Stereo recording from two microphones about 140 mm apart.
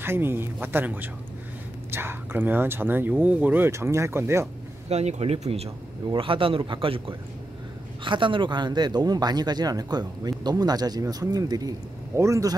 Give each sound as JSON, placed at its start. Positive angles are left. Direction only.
{"t": 0.0, "sound": "speech", "side_deg": -15}
{"t": 4.8, "sound": "speech", "side_deg": -50}